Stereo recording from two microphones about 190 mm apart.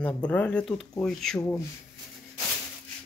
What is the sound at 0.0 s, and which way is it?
Speech, 5° left (ahead or behind).